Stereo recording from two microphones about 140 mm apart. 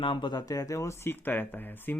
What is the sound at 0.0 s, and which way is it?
Speech, 35° left (ahead or behind).